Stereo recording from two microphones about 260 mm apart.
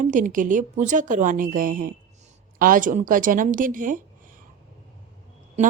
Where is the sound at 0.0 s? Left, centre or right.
Right.